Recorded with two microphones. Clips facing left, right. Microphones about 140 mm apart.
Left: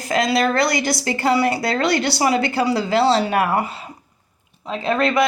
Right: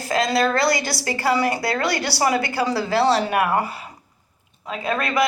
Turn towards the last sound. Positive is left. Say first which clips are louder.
# left 3 dB
turn(degrees=25)  # may be behind; listen again after turning